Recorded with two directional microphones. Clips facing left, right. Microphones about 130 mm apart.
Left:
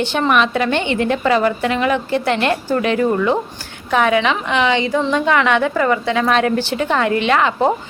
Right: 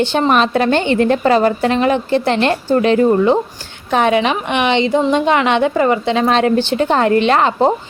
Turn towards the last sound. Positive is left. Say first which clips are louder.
# right 3 dB
turn(degrees=-35)  # may be behind; listen again after turning